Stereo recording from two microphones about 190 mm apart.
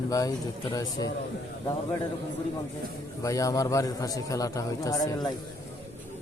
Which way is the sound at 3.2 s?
15° left (ahead or behind).